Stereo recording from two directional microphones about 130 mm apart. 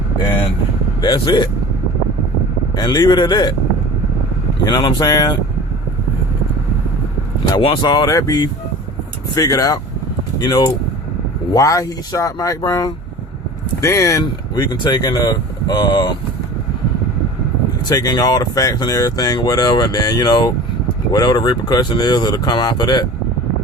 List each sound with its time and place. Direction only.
1.0 s speech: 30° left (ahead or behind)
2.7 s speech: 30° left (ahead or behind)
4.6 s speech: 30° left (ahead or behind)
7.6 s speech: 40° left (ahead or behind)
17.8 s speech: 30° left (ahead or behind)